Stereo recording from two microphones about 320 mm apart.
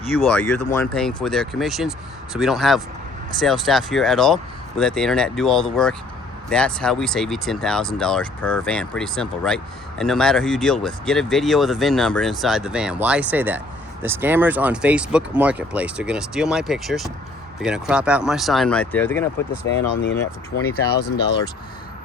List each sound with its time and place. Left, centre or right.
0.2 s speech: centre
20.5 s speech: left